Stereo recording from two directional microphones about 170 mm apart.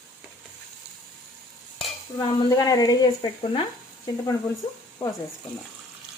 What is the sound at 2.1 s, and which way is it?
Speech, 20° left (ahead or behind).